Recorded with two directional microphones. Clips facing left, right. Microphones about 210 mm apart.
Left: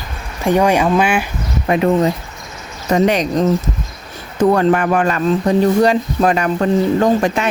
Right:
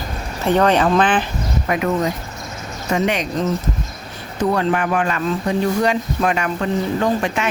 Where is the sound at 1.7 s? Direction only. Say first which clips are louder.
Left 6 dB; 30° left (ahead or behind).